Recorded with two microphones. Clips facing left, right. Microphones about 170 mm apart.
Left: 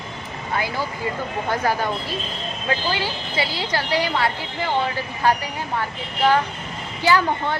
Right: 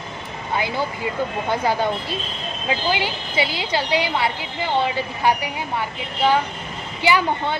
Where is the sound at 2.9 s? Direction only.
20° right (ahead or behind).